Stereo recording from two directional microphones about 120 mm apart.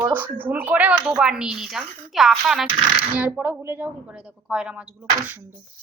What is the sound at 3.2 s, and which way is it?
Speech, 10° right (ahead or behind).